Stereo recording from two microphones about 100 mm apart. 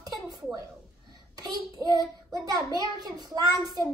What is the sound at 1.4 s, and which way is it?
A child's voice, 40° right (ahead or behind).